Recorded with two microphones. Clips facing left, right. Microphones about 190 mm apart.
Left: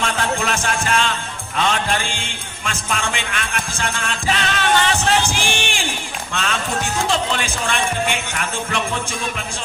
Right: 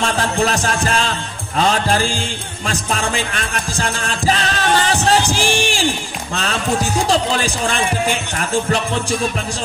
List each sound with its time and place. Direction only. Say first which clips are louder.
0.0 s music: right 4 dB; 35° right (ahead or behind)
6.3 s speech: right 4 dB; 35° right (ahead or behind)